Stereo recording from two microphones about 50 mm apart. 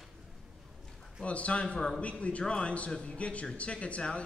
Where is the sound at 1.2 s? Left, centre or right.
Left.